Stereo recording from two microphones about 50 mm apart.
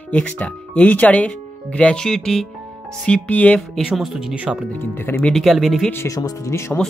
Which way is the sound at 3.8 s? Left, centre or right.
Centre.